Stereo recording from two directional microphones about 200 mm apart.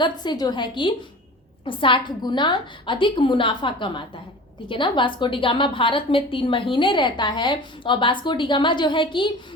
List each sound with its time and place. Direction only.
0.0 s a woman's voice: 20° left (ahead or behind)